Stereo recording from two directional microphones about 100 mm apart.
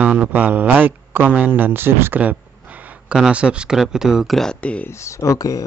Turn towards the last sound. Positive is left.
turn(degrees=35)  # may be behind; listen again after turning